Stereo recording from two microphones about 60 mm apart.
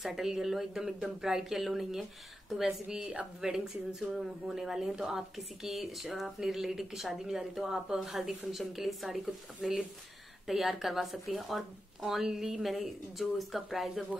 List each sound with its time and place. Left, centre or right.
0.0 s speech: centre
9.6 s speech: centre
10.4 s speech: centre